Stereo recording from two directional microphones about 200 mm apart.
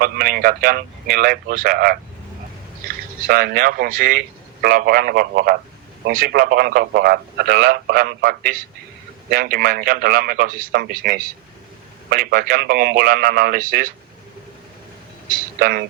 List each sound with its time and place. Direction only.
0.0 s a man's voice: 45° right (ahead or behind)
15.3 s a man's voice: 50° right (ahead or behind)